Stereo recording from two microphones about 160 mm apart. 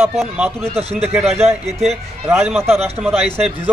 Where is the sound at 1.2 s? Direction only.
40° right (ahead or behind).